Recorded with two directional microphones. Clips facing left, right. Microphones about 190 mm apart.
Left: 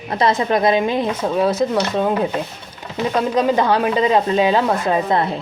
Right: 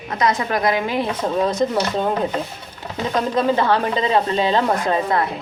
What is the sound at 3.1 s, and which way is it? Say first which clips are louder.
A woman's voice: left 1 dB; 15° left (ahead or behind).